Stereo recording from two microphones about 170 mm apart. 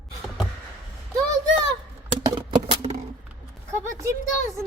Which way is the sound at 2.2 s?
25° right (ahead or behind).